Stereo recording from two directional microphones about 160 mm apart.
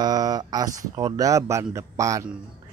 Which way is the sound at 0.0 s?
25° right (ahead or behind).